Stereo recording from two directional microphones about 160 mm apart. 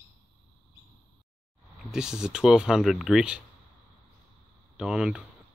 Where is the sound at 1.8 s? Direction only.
5° right (ahead or behind).